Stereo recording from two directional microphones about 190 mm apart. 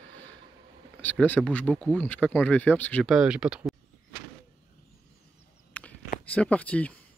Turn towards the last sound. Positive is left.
turn(degrees=5)  # may be behind; listen again after turning